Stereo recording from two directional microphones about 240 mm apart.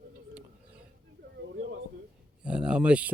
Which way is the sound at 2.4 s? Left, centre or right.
Centre.